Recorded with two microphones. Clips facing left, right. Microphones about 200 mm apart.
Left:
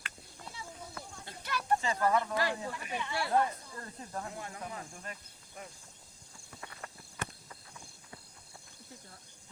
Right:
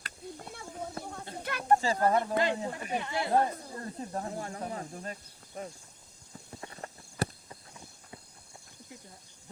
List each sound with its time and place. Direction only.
0.0 s a sound: 50° right (ahead or behind)
1.0 s snake: 60° right (ahead or behind)
1.4 s a sound: 55° right (ahead or behind)
1.8 s speech: 35° right (ahead or behind)
2.3 s speech: 20° right (ahead or behind)
2.7 s speech: 40° right (ahead or behind)
6.5 s clip-clop: 30° right (ahead or behind)